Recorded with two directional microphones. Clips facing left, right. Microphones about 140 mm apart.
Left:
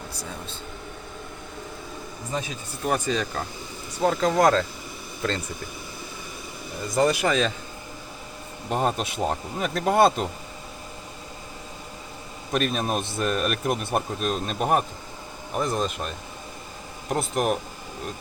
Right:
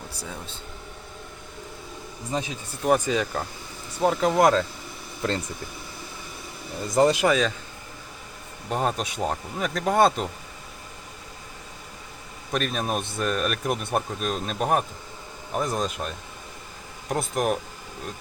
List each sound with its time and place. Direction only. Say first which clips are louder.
2.8 s speech: right 3 dB; 15° right (ahead or behind)
6.9 s speech: right 2 dB; 20° right (ahead or behind)
7.3 s a man's voice: right 1 dB; 5° right (ahead or behind)
8.7 s a man's voice: left 1 dB; centre (ahead or behind)
12.5 s a man's voice: left 2 dB; centre (ahead or behind)